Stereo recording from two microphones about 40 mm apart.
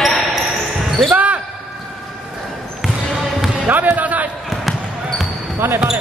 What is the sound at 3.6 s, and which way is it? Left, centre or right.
Music, right.